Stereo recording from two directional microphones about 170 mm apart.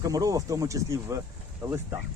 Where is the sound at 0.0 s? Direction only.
20° right (ahead or behind).